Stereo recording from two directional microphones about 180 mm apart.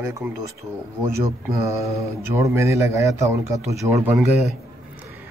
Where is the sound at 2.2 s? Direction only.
15° right (ahead or behind).